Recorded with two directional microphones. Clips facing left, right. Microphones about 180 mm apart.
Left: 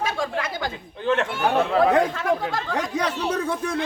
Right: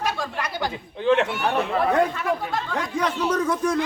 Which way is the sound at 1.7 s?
90° left.